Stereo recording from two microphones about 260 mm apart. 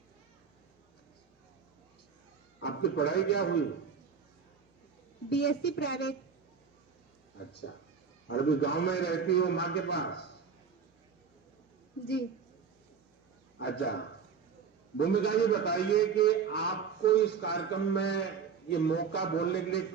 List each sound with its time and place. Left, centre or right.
2.6 s a man's voice: left
5.3 s a man's voice: left
7.6 s a man's voice: left
13.6 s a man's voice: left